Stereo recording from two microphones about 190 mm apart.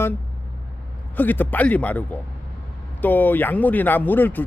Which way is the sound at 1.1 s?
10° left (ahead or behind).